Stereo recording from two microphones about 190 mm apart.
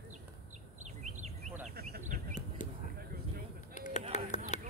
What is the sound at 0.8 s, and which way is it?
Bird, 40° right (ahead or behind).